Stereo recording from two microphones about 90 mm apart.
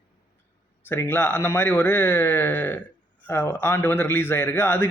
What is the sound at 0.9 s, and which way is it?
A man's voice, 25° left (ahead or behind).